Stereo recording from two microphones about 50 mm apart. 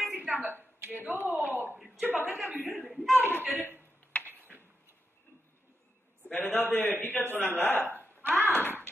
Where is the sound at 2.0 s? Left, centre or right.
Right.